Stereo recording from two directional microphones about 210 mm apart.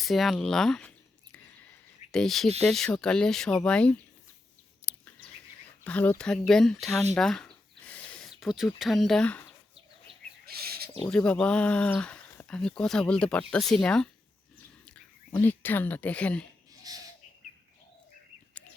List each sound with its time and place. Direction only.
0.0 s speech: centre (ahead or behind)
2.1 s speech: centre (ahead or behind)
4.8 s bird: 15° left (ahead or behind)
5.8 s speech: 5° left (ahead or behind)
10.4 s bird: 45° right (ahead or behind)
11.0 s speech: 5° left (ahead or behind)
16.9 s bird: 15° right (ahead or behind)